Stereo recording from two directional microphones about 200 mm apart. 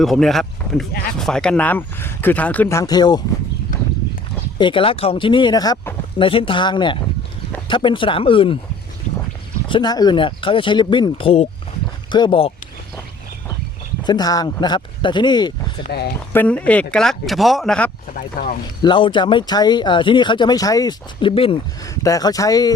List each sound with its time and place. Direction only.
0.0 s speech: centre (ahead or behind); by 3.2 s 20° left (ahead or behind)
4.5 s speech: 25° left (ahead or behind)
9.6 s speech: 25° left (ahead or behind)
14.0 s speech: 20° left (ahead or behind)
15.8 s speech: 55° left (ahead or behind)
16.3 s speech: 10° left (ahead or behind)
18.1 s speech: 45° left (ahead or behind)
18.8 s speech: 25° left (ahead or behind)